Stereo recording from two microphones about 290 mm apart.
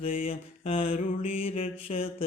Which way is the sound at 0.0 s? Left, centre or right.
Left.